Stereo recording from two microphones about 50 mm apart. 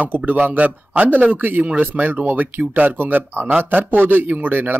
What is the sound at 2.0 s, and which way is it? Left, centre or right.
A man's voice, right.